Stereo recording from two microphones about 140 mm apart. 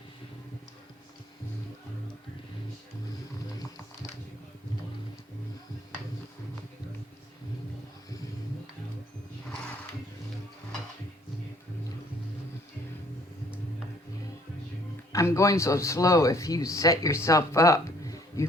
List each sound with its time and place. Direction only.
15.1 s speech: 20° left (ahead or behind)